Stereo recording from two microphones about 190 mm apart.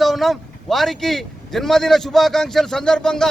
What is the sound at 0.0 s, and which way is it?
Speech, centre (ahead or behind).